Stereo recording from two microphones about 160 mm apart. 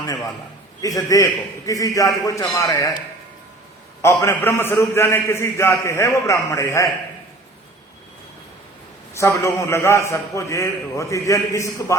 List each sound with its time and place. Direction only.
0.0 s a sound: 25° left (ahead or behind)
0.8 s a man's voice: 20° left (ahead or behind)
4.0 s a man's voice: 15° left (ahead or behind)
9.1 s a man's voice: 20° left (ahead or behind)